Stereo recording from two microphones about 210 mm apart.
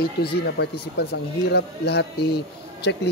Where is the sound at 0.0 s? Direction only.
50° left (ahead or behind).